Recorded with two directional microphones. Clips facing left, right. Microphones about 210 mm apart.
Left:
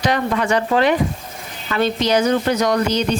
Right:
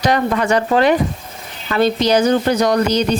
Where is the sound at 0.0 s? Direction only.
40° right (ahead or behind).